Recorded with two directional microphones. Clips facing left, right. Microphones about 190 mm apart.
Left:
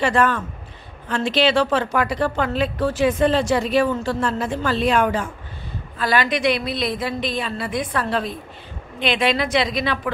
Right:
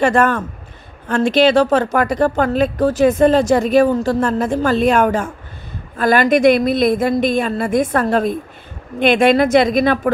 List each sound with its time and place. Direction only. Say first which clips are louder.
0.0 s a woman's voice: right 5 dB; 45° right (ahead or behind)